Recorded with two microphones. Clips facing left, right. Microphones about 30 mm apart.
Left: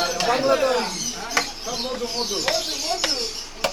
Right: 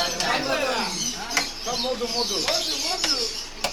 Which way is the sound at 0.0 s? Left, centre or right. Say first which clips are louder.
Left 3 dB; centre.